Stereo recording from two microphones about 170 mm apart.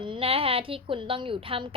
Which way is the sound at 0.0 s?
30° right (ahead or behind).